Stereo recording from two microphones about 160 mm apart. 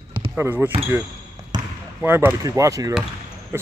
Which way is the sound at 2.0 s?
15° right (ahead or behind).